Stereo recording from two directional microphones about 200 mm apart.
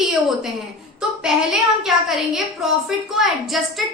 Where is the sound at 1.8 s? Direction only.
Centre (ahead or behind).